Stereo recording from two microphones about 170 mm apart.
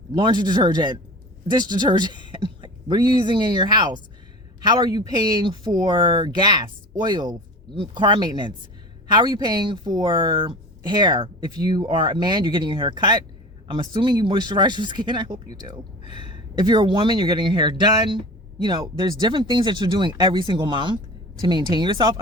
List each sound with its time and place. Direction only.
0.1 s speech: 25° right (ahead or behind)